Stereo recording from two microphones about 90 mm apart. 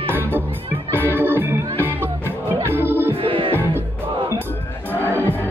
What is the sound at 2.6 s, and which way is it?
Music, 25° right (ahead or behind).